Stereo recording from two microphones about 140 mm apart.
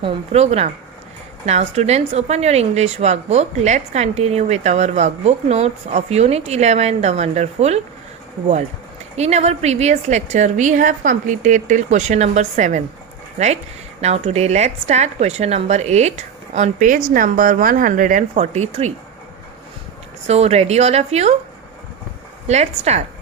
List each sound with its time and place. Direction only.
0.0 s a woman's voice: 50° right (ahead or behind)
9.1 s a woman's voice: 50° right (ahead or behind)
14.0 s a woman's voice: 50° right (ahead or behind); by 18.3 s 70° right (ahead or behind)
18.3 s a woman's voice: 50° right (ahead or behind)
20.2 s a woman's voice: 50° right (ahead or behind)
22.4 s a woman's voice: 50° right (ahead or behind)